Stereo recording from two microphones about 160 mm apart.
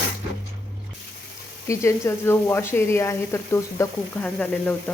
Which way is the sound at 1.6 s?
20° left (ahead or behind).